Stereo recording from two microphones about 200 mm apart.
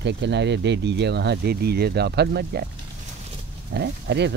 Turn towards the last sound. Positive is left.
turn(degrees=-60)  # may be behind; listen again after turning